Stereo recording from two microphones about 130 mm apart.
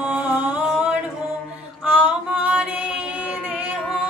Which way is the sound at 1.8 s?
10° right (ahead or behind).